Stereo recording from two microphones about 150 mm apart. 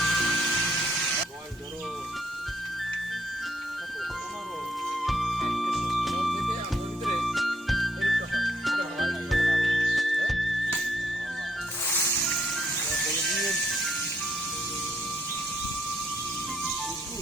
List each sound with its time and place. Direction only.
0.0 s music: 5° left (ahead or behind)
5.0 s music: centre (ahead or behind)
11.9 s vehicle: 15° left (ahead or behind)
12.9 s music: centre (ahead or behind)